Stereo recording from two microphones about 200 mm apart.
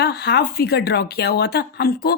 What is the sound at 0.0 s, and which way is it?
Speech, 55° left (ahead or behind).